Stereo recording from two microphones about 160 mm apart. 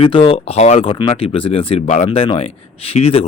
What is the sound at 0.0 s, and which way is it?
Speech, 35° left (ahead or behind).